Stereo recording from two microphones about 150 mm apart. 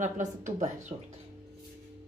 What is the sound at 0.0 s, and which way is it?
Speech, 55° right (ahead or behind).